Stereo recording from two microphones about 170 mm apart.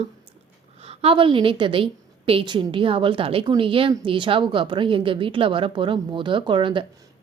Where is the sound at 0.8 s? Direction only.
35° right (ahead or behind).